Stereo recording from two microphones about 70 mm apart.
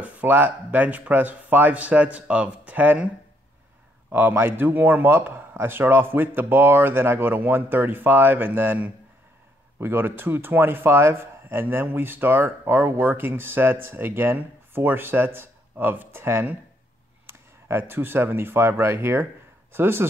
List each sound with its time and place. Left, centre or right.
0.0 s speech: right
4.1 s speech: right